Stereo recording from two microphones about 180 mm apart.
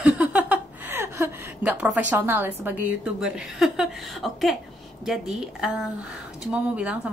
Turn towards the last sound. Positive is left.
turn(degrees=-5)  # may be behind; listen again after turning